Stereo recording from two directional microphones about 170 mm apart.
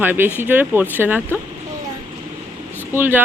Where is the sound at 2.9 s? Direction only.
10° right (ahead or behind).